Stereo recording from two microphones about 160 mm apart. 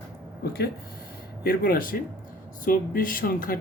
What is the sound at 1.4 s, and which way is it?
Speech, 65° left (ahead or behind).